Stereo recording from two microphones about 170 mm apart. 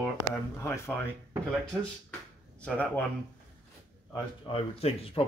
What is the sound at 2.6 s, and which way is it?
Speech, 10° left (ahead or behind).